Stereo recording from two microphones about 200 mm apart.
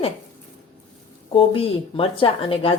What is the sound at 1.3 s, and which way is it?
Speech, 25° left (ahead or behind).